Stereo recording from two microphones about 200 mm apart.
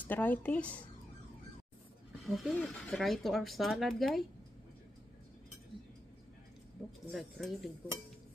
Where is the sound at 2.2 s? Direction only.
Centre (ahead or behind).